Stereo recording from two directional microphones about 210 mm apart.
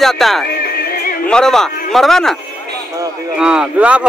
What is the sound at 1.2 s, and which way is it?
A man's voice, 5° left (ahead or behind).